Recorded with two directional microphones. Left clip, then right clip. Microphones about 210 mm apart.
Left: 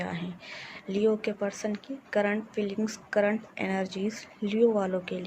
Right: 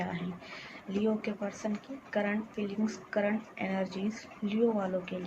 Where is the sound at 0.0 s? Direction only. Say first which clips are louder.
Left 2 dB; 50° left (ahead or behind).